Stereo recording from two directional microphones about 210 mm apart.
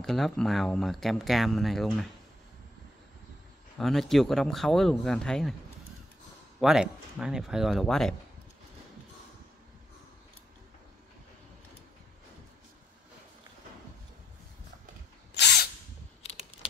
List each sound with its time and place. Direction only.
0.0 s speech: centre (ahead or behind)
3.7 s speech: centre (ahead or behind)
6.6 s speech: 5° right (ahead or behind)
15.3 s drill: 50° left (ahead or behind)
16.2 s typing: 30° left (ahead or behind)